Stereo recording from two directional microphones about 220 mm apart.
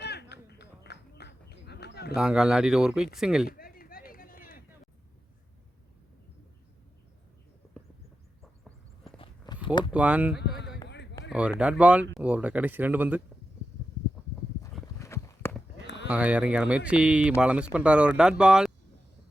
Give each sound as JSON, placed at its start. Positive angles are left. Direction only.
{"t": 0.0, "sound": "a sound", "side_deg": 50}
{"t": 2.1, "sound": "speech", "side_deg": -5}
{"t": 3.4, "sound": "a sound", "side_deg": 40}
{"t": 7.8, "sound": "horse", "side_deg": 5}
{"t": 9.1, "sound": "walk", "side_deg": 25}
{"t": 9.6, "sound": "a sound", "side_deg": 20}
{"t": 9.9, "sound": "speech", "side_deg": -5}
{"t": 10.8, "sound": "run", "side_deg": 50}
{"t": 11.3, "sound": "speech", "side_deg": -5}
{"t": 14.9, "sound": "walk", "side_deg": 15}
{"t": 16.0, "sound": "speech", "side_deg": -5}